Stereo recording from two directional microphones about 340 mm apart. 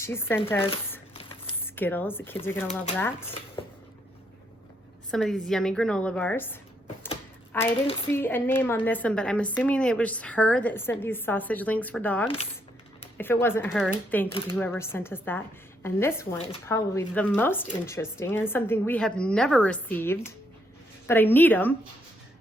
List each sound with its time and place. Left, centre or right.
0.0 s speech: centre
1.1 s a sound: centre
1.7 s a woman's voice: centre
5.1 s a woman's voice: centre